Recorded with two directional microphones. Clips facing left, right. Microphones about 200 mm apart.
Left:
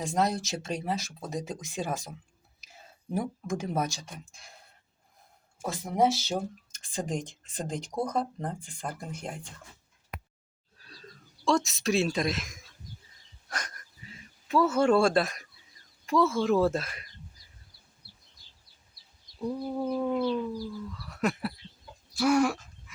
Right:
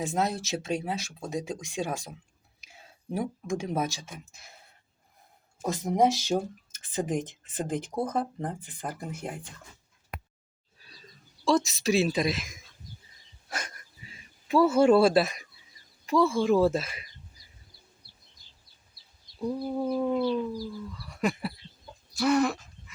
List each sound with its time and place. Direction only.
0.0 s speech: centre (ahead or behind)
5.6 s speech: 20° right (ahead or behind)
11.4 s speech: centre (ahead or behind)
13.5 s a sound: 10° right (ahead or behind)
16.0 s speech: centre (ahead or behind)
19.4 s speech: 5° right (ahead or behind)